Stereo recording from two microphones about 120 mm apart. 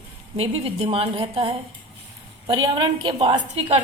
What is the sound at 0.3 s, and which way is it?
A woman's voice, 55° right (ahead or behind).